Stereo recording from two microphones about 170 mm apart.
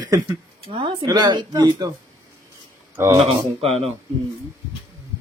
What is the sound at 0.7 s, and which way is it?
Speech, 30° right (ahead or behind).